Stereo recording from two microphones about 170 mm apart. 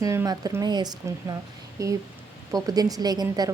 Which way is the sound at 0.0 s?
20° right (ahead or behind).